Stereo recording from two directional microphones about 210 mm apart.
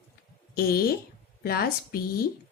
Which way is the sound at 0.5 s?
45° left (ahead or behind).